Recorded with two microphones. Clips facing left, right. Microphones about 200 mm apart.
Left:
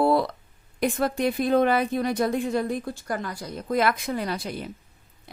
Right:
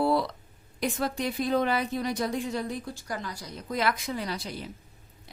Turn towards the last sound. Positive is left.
turn(degrees=55)  # may be behind; listen again after turning